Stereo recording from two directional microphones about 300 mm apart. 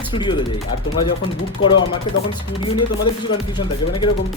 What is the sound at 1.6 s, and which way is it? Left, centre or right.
Speech, left.